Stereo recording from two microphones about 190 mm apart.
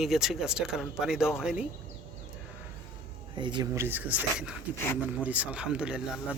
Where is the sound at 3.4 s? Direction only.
25° right (ahead or behind); by 4.6 s 5° right (ahead or behind).